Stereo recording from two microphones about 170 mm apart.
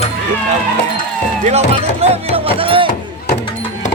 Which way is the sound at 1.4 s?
40° right (ahead or behind).